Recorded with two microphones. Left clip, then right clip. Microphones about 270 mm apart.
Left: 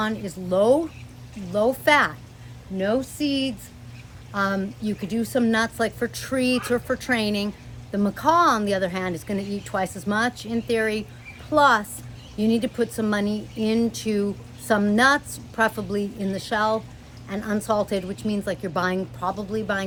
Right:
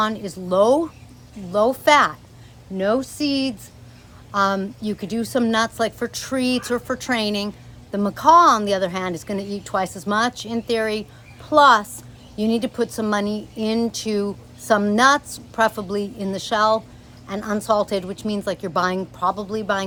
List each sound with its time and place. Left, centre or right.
0.0 s a woman's voice: centre